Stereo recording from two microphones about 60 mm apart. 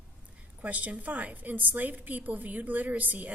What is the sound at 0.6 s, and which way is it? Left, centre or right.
A woman's voice, right.